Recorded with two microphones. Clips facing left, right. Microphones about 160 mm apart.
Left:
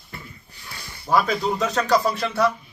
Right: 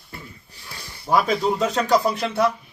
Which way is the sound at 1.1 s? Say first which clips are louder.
Right 1 dB; 15° right (ahead or behind).